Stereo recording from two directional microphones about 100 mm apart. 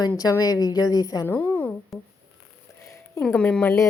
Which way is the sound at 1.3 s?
15° left (ahead or behind).